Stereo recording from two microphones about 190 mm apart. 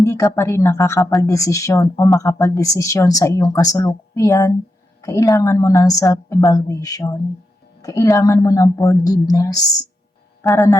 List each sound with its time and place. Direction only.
0.0 s speech: 15° left (ahead or behind)